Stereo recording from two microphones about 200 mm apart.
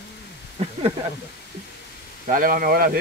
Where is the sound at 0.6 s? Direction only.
30° right (ahead or behind).